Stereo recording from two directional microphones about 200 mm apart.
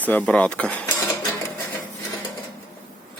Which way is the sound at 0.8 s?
20° left (ahead or behind).